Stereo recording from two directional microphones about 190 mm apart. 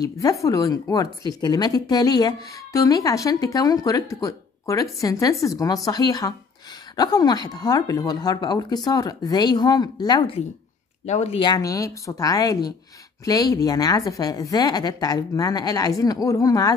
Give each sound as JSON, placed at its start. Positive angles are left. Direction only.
{"t": 0.0, "sound": "a woman's voice", "side_deg": 15}